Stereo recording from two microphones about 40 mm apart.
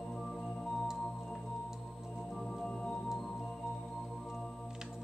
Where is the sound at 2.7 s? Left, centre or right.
Left.